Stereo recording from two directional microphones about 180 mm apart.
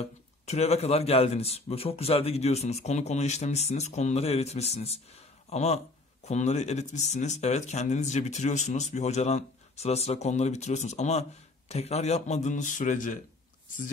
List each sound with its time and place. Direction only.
0.0 s a man's voice: 35° left (ahead or behind)